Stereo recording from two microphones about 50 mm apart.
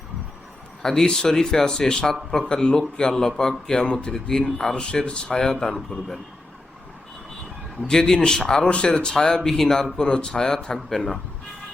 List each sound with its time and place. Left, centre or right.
0.8 s speech: centre
7.9 s speech: centre